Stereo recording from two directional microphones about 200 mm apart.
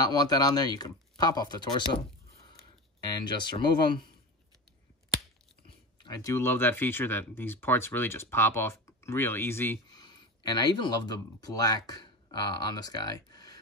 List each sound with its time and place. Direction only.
0.0 s speech: 20° left (ahead or behind)
3.0 s speech: 20° left (ahead or behind)
5.9 s speech: 20° left (ahead or behind)